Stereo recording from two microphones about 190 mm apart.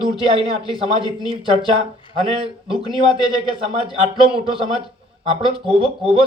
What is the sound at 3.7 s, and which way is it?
Speech, 30° right (ahead or behind).